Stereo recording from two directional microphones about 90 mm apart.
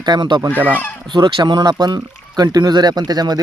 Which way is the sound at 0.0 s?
50° right (ahead or behind).